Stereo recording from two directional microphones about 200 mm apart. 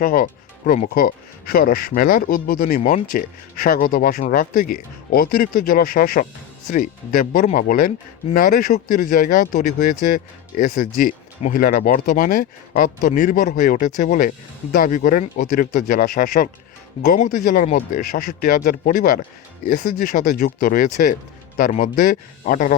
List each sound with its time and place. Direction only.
0.0 s speech: 45° left (ahead or behind)